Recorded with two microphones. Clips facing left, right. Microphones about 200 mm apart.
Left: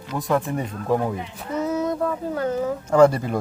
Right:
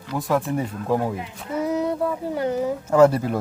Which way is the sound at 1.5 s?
15° right (ahead or behind).